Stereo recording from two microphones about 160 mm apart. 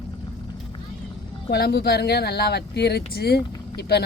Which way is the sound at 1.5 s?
85° left.